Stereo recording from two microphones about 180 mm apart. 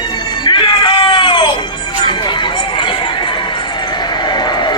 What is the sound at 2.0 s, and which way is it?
Run, 25° left (ahead or behind).